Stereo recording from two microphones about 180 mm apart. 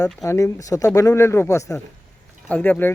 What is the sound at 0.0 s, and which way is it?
Speech, 20° left (ahead or behind).